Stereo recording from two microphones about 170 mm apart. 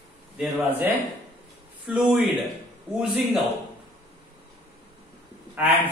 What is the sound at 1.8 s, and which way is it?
Speech, 5° right (ahead or behind).